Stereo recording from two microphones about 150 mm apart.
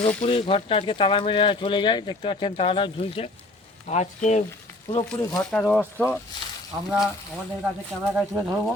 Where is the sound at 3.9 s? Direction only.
50° left (ahead or behind).